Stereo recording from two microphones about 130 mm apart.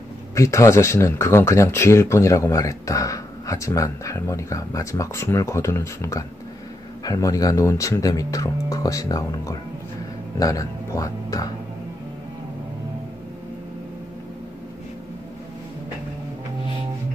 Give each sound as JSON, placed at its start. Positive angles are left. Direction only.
{"t": 0.3, "sound": "speech", "side_deg": 20}